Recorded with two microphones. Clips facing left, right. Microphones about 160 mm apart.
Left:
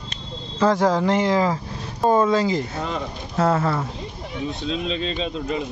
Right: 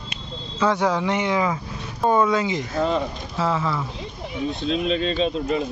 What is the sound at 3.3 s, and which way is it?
Speech, 45° left (ahead or behind).